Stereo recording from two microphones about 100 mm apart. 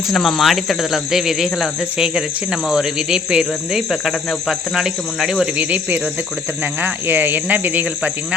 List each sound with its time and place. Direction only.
0.1 s speech: centre (ahead or behind)
5.6 s speech: 15° right (ahead or behind)